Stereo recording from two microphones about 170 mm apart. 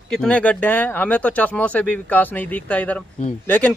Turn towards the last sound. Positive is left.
turn(degrees=5)  # may be behind; listen again after turning